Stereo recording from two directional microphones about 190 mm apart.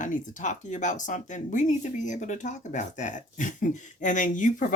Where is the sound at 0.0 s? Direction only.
45° left (ahead or behind).